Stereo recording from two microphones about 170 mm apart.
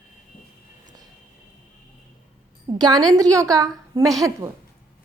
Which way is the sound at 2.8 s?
25° right (ahead or behind).